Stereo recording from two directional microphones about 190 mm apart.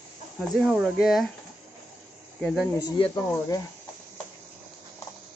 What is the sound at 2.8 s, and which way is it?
Speech, 25° left (ahead or behind).